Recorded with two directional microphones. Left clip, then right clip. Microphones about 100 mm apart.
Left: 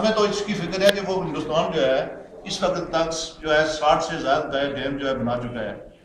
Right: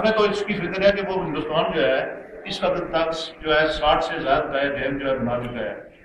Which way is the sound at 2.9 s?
5° left (ahead or behind).